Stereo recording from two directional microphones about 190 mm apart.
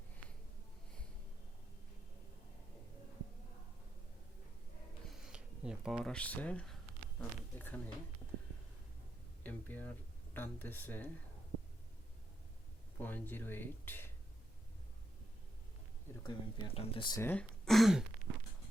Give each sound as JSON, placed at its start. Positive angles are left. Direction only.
{"t": 5.0, "sound": "speech", "side_deg": 0}
{"t": 9.4, "sound": "a sound", "side_deg": 10}
{"t": 10.3, "sound": "speech", "side_deg": 10}
{"t": 13.0, "sound": "speech", "side_deg": 10}
{"t": 16.2, "sound": "speech", "side_deg": 30}
{"t": 17.2, "sound": "speech", "side_deg": 10}